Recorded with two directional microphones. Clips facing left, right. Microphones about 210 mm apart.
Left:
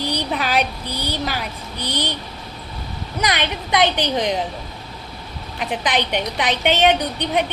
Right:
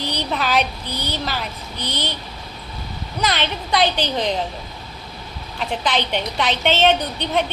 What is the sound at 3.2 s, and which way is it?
A woman's voice, 15° left (ahead or behind).